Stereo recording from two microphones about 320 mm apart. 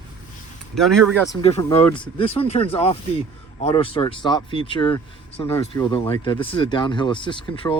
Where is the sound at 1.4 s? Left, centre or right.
Centre.